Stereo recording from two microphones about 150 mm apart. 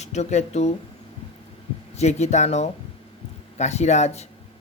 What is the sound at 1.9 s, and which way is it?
Speech, 50° left (ahead or behind).